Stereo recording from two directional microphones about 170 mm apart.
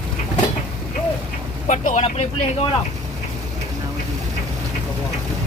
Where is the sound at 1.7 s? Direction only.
45° left (ahead or behind).